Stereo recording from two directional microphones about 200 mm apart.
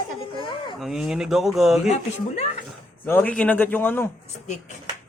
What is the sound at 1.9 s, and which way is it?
Speech, 35° left (ahead or behind).